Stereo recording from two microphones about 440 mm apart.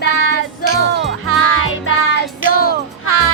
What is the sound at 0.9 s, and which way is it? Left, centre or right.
Speech, right.